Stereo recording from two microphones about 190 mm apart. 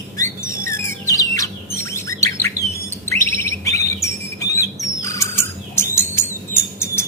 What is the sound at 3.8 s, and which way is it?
Chirp, 15° left (ahead or behind).